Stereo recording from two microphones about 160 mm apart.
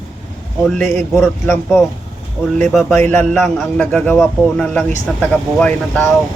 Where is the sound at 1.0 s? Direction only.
Centre (ahead or behind).